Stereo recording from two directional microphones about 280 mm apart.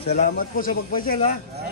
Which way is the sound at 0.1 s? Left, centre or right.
Left.